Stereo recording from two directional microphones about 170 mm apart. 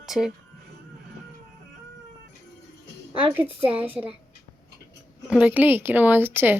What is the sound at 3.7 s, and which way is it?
Speech, 10° right (ahead or behind).